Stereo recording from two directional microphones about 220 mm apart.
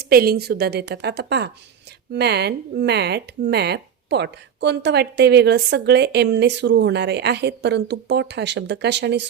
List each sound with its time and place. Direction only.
0.0 s speech: 45° right (ahead or behind)